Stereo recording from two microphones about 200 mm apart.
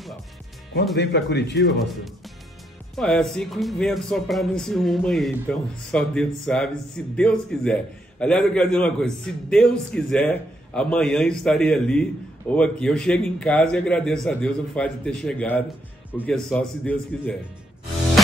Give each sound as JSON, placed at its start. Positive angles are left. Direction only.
{"t": 0.9, "sound": "speech", "side_deg": 60}
{"t": 3.0, "sound": "a man's voice", "side_deg": 0}